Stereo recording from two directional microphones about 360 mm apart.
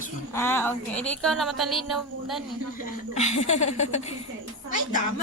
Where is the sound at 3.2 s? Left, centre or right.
Centre.